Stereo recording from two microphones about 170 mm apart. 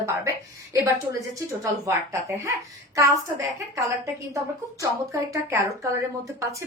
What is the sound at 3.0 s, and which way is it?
A woman's voice, 20° right (ahead or behind).